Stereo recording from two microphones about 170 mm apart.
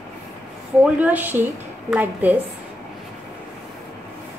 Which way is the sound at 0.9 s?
10° right (ahead or behind).